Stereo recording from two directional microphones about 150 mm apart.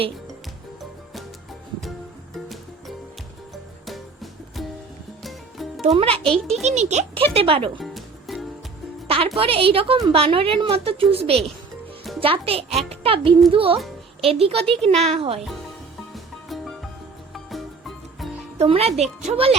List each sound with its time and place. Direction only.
3.8 s music: centre (ahead or behind)
6.0 s a woman's voice: 40° right (ahead or behind)
6.5 s speech: 50° right (ahead or behind)
7.3 s a woman's voice: 40° right (ahead or behind)
7.8 s music: centre (ahead or behind)
9.0 s a woman's voice: 40° right (ahead or behind)
16.1 s music: centre (ahead or behind)
18.6 s speech: 45° right (ahead or behind)